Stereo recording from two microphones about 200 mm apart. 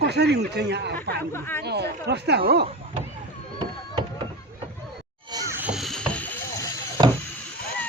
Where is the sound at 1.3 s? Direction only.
10° left (ahead or behind).